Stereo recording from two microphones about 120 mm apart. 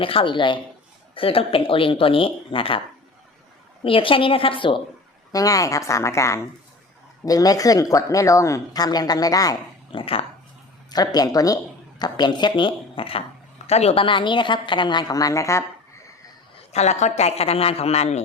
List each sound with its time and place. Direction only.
0.0 s speech: 45° left (ahead or behind)
3.8 s speech: 45° left (ahead or behind)
5.3 s a woman's voice: 30° left (ahead or behind)
9.9 s speech: 50° left (ahead or behind)
10.9 s speech: 35° left (ahead or behind); by 13.2 s 50° left (ahead or behind)
13.7 s speech: 60° left (ahead or behind); by 15.6 s 25° left (ahead or behind)
16.7 s speech: 70° left (ahead or behind)